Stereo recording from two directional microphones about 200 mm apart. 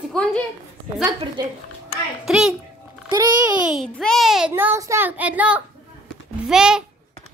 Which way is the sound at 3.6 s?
Centre (ahead or behind).